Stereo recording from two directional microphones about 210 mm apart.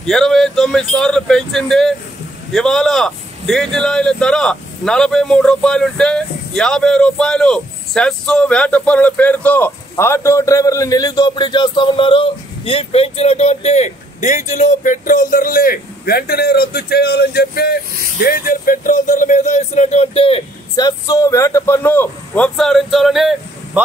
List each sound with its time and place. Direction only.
0.0 s speech: centre (ahead or behind)